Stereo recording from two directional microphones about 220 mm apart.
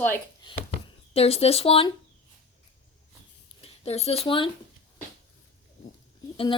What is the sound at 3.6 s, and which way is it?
Speech, 30° left (ahead or behind).